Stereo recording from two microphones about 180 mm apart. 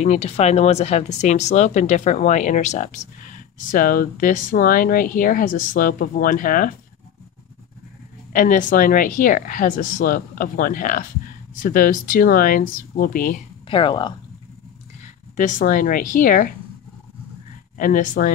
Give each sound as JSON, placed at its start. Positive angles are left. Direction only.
{"t": 0.0, "sound": "speech", "side_deg": 40}
{"t": 8.3, "sound": "speech", "side_deg": 50}
{"t": 13.7, "sound": "speech", "side_deg": 25}
{"t": 15.3, "sound": "speech", "side_deg": 50}
{"t": 17.7, "sound": "speech", "side_deg": 45}